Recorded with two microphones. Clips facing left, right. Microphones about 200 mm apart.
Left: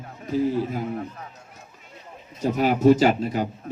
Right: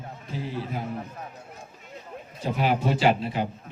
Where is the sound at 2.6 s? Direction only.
45° left (ahead or behind).